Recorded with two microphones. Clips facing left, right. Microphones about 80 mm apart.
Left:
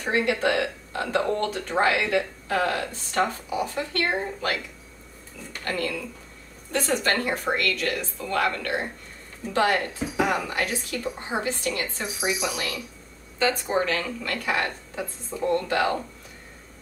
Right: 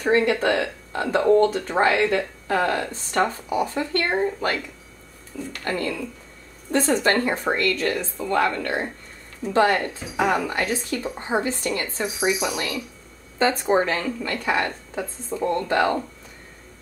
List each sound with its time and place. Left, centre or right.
0.3 s speech: right
2.0 s speech: centre
2.4 s speech: right
5.7 s speech: right